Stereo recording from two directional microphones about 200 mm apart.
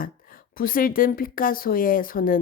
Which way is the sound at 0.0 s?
45° left (ahead or behind).